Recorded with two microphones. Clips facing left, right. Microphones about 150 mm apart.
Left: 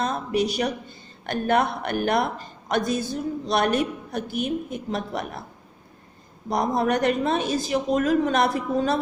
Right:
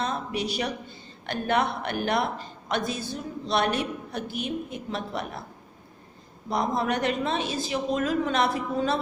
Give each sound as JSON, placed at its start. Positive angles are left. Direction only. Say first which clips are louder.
{"t": 0.0, "sound": "a man's voice", "louder": "left 5 dB", "side_deg": 45}
{"t": 6.5, "sound": "a man's voice", "louder": "left 4 dB", "side_deg": 45}